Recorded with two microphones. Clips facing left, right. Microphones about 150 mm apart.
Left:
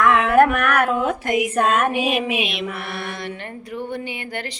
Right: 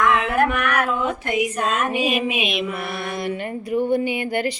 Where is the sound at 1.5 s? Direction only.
55° left (ahead or behind).